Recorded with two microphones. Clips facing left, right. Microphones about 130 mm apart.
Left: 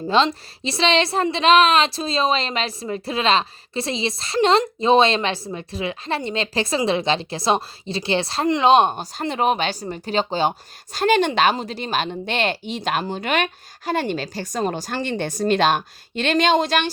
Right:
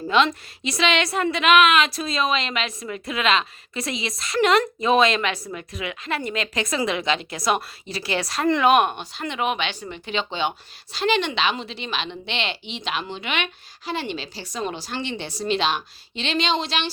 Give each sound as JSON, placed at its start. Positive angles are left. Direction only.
{"t": 0.1, "sound": "a woman's voice", "side_deg": 30}